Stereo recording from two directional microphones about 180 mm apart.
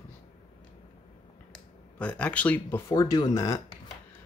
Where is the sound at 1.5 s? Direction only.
5° left (ahead or behind).